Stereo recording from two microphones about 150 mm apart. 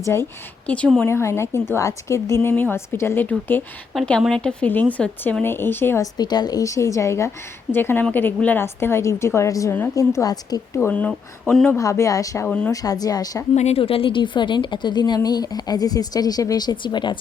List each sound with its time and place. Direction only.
0.0 s a woman's voice: 20° left (ahead or behind)
3.9 s a woman's voice: 5° left (ahead or behind)
6.1 s a woman's voice: 30° left (ahead or behind)
10.8 s a woman's voice: 10° left (ahead or behind)
11.8 s a woman's voice: 20° left (ahead or behind)
12.5 s a woman's voice: 5° left (ahead or behind)
12.7 s a woman's voice: 25° left (ahead or behind)
13.6 s a woman's voice: 45° left (ahead or behind)